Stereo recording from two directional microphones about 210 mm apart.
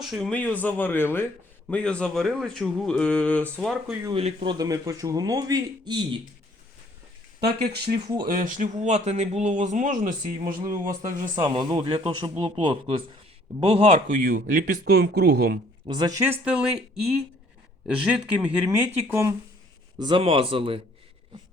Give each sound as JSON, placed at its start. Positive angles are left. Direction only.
{"t": 0.0, "sound": "speech", "side_deg": 0}
{"t": 4.0, "sound": "speech", "side_deg": -25}
{"t": 4.5, "sound": "speech", "side_deg": -15}
{"t": 7.9, "sound": "speech", "side_deg": -20}
{"t": 8.3, "sound": "a man's voice", "side_deg": -40}
{"t": 10.4, "sound": "a man's voice", "side_deg": -20}
{"t": 15.9, "sound": "speech", "side_deg": -20}
{"t": 20.0, "sound": "speech", "side_deg": -25}